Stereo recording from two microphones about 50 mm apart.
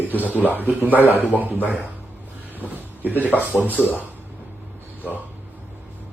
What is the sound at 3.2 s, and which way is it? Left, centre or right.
Speech, left.